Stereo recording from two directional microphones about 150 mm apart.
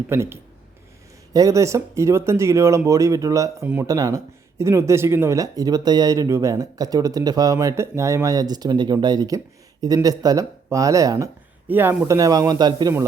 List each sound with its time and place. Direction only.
0.1 s speech: 15° right (ahead or behind)